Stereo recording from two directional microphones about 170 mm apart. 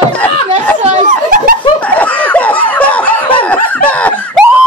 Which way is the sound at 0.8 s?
50° right (ahead or behind).